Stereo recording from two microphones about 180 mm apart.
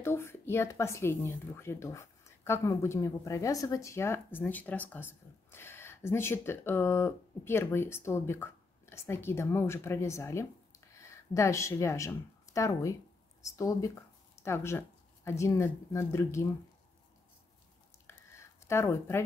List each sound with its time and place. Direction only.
0.0 s speech: 15° left (ahead or behind)
18.7 s speech: 15° left (ahead or behind)